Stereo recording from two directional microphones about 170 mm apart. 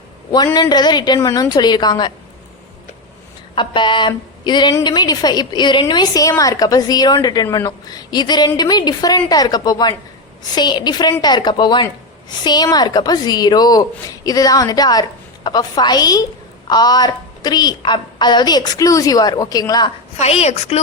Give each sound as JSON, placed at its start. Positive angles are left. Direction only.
{"t": 0.5, "sound": "a woman's voice", "side_deg": 25}
{"t": 3.5, "sound": "a woman's voice", "side_deg": 30}
{"t": 20.1, "sound": "a woman's voice", "side_deg": 40}